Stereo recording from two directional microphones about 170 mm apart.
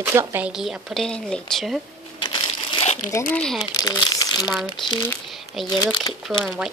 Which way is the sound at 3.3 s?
5° left (ahead or behind).